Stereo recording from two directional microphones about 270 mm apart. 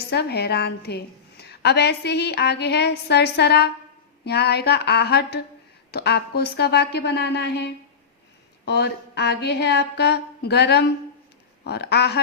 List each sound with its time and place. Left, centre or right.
0.1 s a woman's voice: left
8.6 s a woman's voice: left